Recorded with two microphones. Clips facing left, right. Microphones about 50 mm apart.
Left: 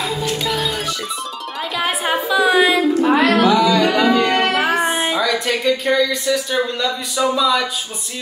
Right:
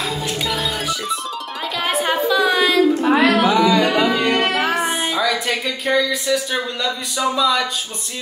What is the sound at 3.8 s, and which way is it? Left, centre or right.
Speech, centre.